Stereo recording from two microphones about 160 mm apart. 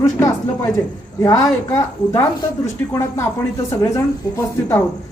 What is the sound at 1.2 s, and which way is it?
Speech, 20° left (ahead or behind).